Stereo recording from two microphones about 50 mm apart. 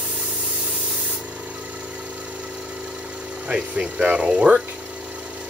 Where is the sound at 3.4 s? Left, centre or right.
Centre.